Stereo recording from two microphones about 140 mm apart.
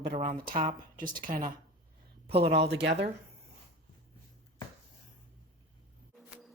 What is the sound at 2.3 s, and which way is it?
Speech, 45° right (ahead or behind).